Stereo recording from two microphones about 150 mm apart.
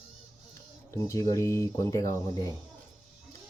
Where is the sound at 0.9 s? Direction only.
20° left (ahead or behind).